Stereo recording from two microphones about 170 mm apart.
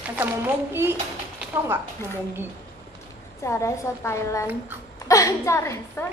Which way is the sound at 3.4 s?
15° left (ahead or behind).